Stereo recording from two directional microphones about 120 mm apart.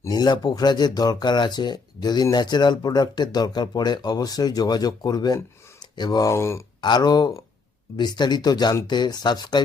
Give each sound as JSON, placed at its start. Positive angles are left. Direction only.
{"t": 0.0, "sound": "speech", "side_deg": 35}
{"t": 6.8, "sound": "speech", "side_deg": 35}